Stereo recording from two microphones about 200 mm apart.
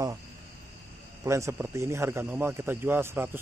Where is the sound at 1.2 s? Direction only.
15° right (ahead or behind).